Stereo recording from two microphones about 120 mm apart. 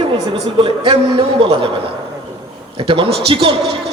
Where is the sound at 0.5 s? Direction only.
50° right (ahead or behind).